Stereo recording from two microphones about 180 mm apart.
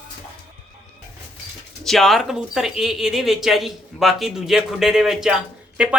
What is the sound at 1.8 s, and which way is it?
Speech, centre (ahead or behind).